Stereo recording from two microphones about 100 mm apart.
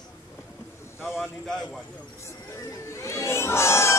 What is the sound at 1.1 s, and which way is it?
Speech, centre (ahead or behind).